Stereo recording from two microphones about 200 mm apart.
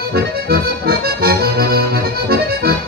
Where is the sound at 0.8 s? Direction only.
50° right (ahead or behind).